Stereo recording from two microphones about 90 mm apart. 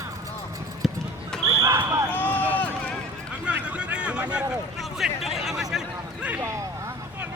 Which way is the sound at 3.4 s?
15° right (ahead or behind).